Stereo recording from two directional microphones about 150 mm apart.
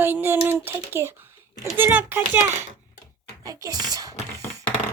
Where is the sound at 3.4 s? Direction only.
25° right (ahead or behind).